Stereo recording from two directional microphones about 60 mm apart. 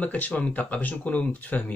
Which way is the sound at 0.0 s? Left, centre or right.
Left.